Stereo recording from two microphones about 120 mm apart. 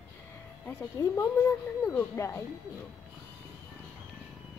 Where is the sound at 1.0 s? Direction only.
25° left (ahead or behind).